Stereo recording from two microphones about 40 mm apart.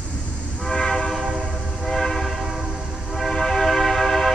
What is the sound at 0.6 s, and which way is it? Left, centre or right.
Train, centre.